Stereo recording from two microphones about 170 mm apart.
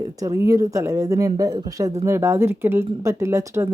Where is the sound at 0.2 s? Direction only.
20° right (ahead or behind).